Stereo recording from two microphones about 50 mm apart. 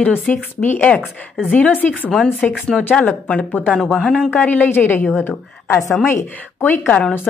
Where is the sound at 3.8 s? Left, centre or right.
Centre.